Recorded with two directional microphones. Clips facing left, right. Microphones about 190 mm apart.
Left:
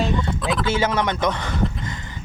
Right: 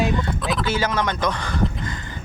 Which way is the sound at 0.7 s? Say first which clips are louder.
Left 2 dB; 25° left (ahead or behind).